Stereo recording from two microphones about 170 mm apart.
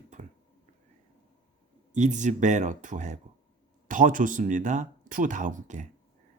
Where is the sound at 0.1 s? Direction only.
45° right (ahead or behind).